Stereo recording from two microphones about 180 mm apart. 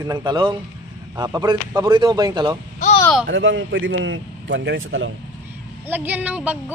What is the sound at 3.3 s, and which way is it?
A man's voice, 90° right.